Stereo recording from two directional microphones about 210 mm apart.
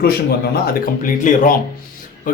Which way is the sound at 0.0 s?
50° left (ahead or behind).